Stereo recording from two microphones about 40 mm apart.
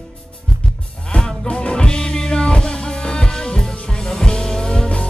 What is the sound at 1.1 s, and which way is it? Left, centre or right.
Music, left.